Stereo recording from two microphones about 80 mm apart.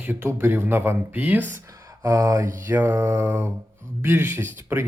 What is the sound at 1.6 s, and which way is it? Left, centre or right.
Speech, right.